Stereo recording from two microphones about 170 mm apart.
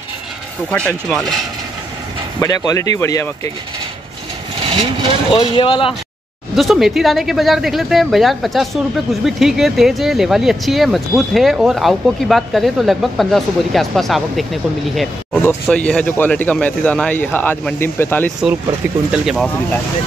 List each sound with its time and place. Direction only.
0.7 s speech: 5° left (ahead or behind)
2.4 s speech: 20° left (ahead or behind)
4.6 s speech: 35° right (ahead or behind)
5.3 s speech: 30° left (ahead or behind)
6.5 s speech: centre (ahead or behind)
19.1 s speech: centre (ahead or behind)